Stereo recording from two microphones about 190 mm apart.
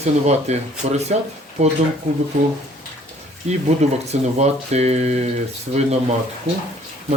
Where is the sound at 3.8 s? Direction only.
35° right (ahead or behind).